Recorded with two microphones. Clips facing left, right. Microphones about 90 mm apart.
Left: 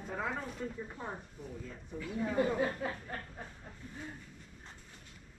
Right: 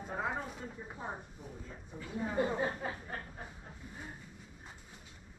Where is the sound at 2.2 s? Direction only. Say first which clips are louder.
Left 2 dB; 20° right (ahead or behind).